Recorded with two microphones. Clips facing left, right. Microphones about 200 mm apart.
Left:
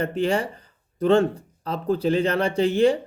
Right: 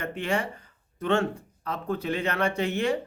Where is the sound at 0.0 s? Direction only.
35° left (ahead or behind).